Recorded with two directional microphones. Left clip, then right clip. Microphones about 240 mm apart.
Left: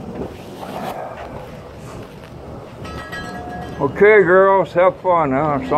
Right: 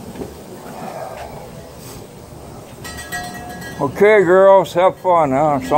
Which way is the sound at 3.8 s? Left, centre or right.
Right.